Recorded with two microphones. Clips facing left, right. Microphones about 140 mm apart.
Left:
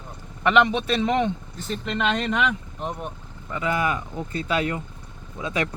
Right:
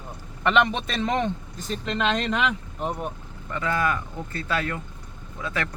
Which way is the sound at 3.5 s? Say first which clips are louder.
Left 1 dB; 15° left (ahead or behind).